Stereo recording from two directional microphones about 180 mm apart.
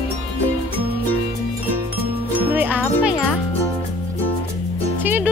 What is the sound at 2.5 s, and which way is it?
Music, 10° right (ahead or behind).